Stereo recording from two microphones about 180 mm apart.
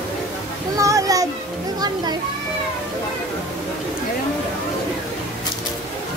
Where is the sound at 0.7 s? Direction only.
20° right (ahead or behind).